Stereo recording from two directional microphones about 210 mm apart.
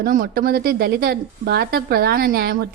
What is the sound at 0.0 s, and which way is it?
A woman's voice, 45° right (ahead or behind).